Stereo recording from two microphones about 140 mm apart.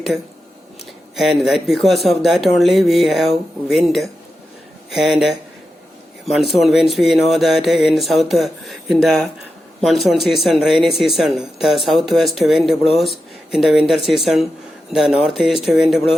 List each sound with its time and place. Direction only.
1.1 s speech: centre (ahead or behind)